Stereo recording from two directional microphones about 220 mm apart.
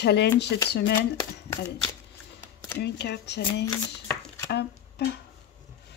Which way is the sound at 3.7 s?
10° left (ahead or behind).